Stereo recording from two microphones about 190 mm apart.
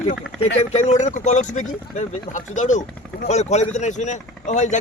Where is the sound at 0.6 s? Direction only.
35° left (ahead or behind).